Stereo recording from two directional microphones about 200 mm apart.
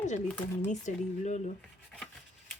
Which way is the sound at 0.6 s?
35° left (ahead or behind).